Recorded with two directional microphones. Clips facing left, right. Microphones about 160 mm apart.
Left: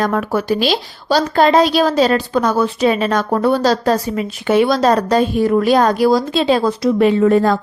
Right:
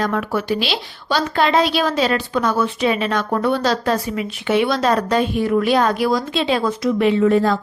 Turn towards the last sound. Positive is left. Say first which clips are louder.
# left 3 dB
turn(degrees=45)  # may be behind; listen again after turning